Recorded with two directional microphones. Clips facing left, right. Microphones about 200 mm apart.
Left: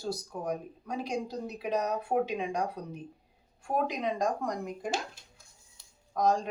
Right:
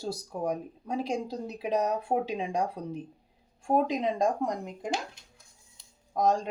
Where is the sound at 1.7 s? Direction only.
30° right (ahead or behind).